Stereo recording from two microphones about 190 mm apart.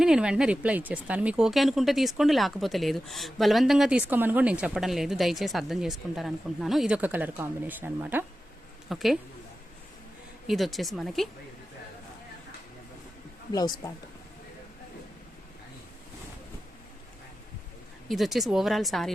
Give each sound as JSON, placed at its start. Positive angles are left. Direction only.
{"t": 0.0, "sound": "speech", "side_deg": -5}
{"t": 10.4, "sound": "speech", "side_deg": 0}
{"t": 13.5, "sound": "speech", "side_deg": 20}
{"t": 18.1, "sound": "speech", "side_deg": 0}